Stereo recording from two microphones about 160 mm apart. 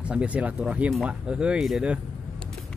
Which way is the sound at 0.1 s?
10° right (ahead or behind).